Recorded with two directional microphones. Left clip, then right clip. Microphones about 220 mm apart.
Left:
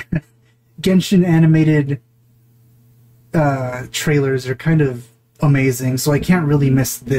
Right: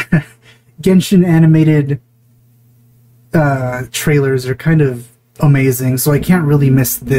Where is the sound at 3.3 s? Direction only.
15° right (ahead or behind).